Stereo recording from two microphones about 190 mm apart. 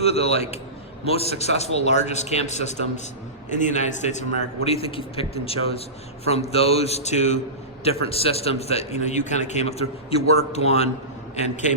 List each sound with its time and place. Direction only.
0.0 s a man's voice: 35° left (ahead or behind)